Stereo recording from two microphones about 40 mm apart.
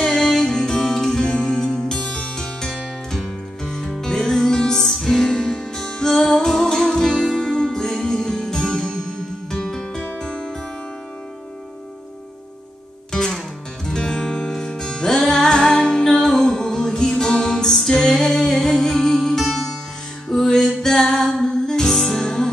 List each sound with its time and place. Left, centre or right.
0.0 s music: centre
13.1 s music: centre
20.4 s music: centre